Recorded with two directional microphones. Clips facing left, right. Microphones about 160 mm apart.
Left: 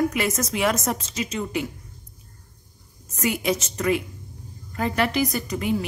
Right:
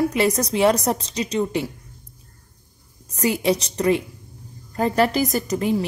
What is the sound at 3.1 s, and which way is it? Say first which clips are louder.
A woman's voice: right 4 dB; 35° right (ahead or behind).